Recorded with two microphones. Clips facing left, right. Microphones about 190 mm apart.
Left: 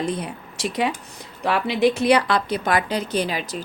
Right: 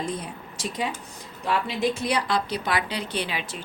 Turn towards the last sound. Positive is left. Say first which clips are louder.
# left 6 dB
turn(degrees=40)  # may be behind; listen again after turning